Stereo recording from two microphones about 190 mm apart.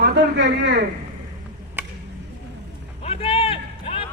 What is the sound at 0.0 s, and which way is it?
Speech, 65° right (ahead or behind).